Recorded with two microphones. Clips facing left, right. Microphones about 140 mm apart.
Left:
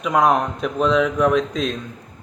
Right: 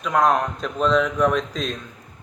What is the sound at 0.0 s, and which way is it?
Speech, 10° left (ahead or behind).